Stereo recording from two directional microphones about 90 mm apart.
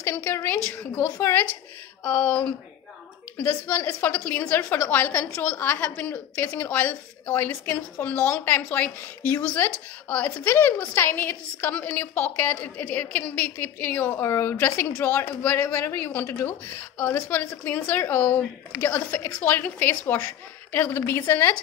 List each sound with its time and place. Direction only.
0.0 s a woman's voice: 25° left (ahead or behind)
3.3 s a woman's voice: 15° left (ahead or behind)
14.1 s a woman's voice: 30° left (ahead or behind)